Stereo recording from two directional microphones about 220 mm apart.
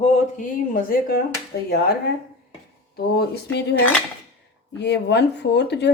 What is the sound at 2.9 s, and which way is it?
Speech, 45° left (ahead or behind).